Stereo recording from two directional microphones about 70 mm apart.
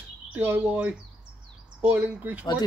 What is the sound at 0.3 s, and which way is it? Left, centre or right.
Speech, right.